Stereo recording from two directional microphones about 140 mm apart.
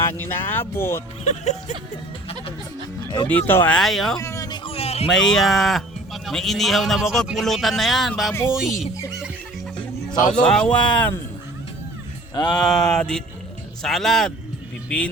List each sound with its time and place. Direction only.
0.1 s speech: 15° left (ahead or behind)
1.2 s speech: 55° left (ahead or behind)
3.2 s speech: 15° left (ahead or behind)
3.8 s speech: centre (ahead or behind)
4.2 s a sound: 20° left (ahead or behind); by 5.0 s 45° left (ahead or behind)
5.0 s speech: 5° left (ahead or behind)
8.3 s speech: 20° left (ahead or behind)
10.2 s a man's voice: 70° left (ahead or behind)
10.4 s speech: 5° left (ahead or behind)
12.3 s a sound: 30° left (ahead or behind)
12.5 s speech: 5° left (ahead or behind)